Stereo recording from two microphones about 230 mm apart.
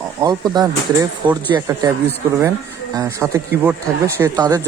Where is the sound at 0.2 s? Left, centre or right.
Centre.